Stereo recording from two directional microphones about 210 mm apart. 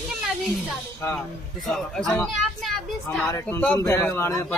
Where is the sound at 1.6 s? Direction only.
Centre (ahead or behind).